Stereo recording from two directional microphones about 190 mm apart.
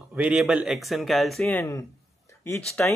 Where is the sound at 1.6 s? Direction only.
15° left (ahead or behind).